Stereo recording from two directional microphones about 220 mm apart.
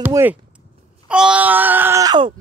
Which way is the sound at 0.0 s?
10° right (ahead or behind).